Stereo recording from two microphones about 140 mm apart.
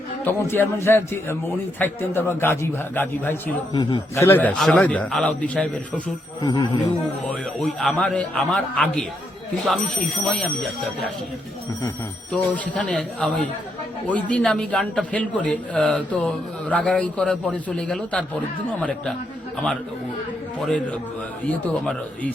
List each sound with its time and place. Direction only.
0.3 s a man's voice: 15° left (ahead or behind)
3.7 s a man's voice: 30° left (ahead or behind); by 6.0 s 10° left (ahead or behind)
6.4 s a man's voice: 25° left (ahead or behind)
7.3 s a man's voice: 5° left (ahead or behind)
12.3 s a man's voice: 10° left (ahead or behind)
20.7 s a man's voice: 10° left (ahead or behind)